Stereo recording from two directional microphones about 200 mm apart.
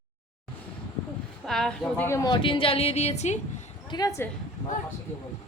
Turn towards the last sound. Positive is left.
turn(degrees=20)  # may be behind; listen again after turning